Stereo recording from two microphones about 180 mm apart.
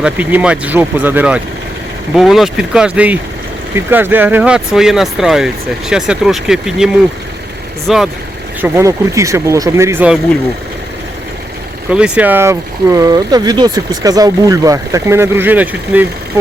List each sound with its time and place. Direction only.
0.0 s speech: 10° right (ahead or behind)
8.6 s speech: 15° right (ahead or behind)
11.9 s speech: 5° right (ahead or behind)